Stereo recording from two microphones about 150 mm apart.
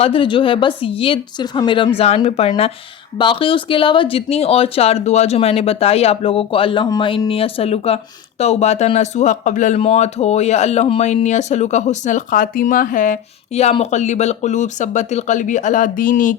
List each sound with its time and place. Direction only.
0.0 s speech: 35° left (ahead or behind); by 16.4 s 60° left (ahead or behind)